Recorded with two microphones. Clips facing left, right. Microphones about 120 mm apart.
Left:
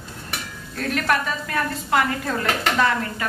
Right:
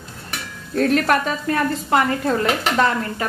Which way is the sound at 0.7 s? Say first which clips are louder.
Right 6 dB; 35° right (ahead or behind).